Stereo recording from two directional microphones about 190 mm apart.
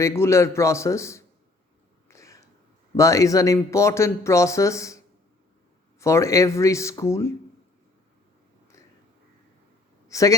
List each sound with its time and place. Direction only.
0.0 s speech: 15° left (ahead or behind)
2.0 s a sound: 15° left (ahead or behind)
2.9 s speech: 15° left (ahead or behind)
6.0 s speech: 15° left (ahead or behind)
10.1 s a man's voice: 15° left (ahead or behind)